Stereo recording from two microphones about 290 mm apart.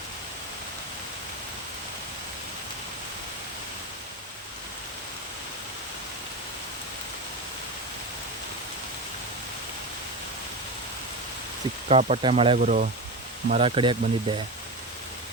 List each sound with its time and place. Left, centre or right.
11.9 s speech: right